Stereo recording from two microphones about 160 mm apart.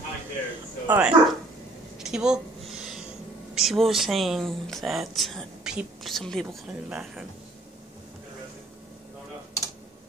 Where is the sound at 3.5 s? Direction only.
Centre (ahead or behind).